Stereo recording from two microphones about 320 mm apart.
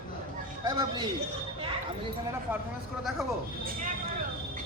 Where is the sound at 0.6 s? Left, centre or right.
Centre.